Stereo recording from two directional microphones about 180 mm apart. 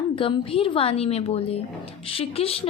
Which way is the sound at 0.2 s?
30° left (ahead or behind).